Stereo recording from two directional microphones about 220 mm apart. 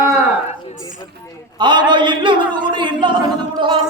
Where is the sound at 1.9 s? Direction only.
20° right (ahead or behind).